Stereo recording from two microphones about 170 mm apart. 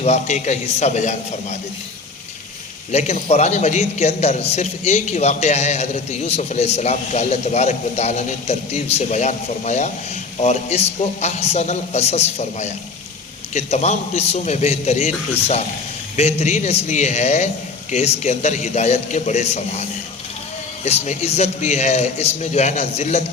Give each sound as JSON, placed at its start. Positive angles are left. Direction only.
{"t": 0.0, "sound": "a man's voice", "side_deg": 40}
{"t": 2.9, "sound": "a man's voice", "side_deg": 45}